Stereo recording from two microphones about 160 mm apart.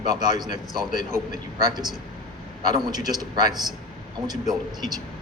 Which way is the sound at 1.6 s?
25° right (ahead or behind).